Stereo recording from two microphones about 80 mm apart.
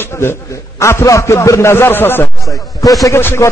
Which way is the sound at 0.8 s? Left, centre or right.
Left.